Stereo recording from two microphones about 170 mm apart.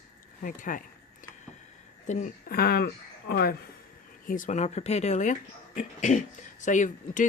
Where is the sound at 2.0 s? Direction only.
45° left (ahead or behind).